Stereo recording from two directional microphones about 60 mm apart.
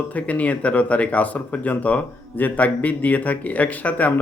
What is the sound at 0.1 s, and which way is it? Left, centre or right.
Speech, left.